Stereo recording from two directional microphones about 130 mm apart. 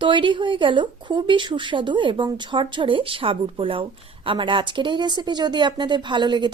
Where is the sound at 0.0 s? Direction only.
40° right (ahead or behind).